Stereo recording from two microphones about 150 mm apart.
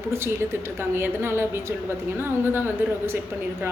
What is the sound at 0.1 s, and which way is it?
A woman's voice, 15° right (ahead or behind).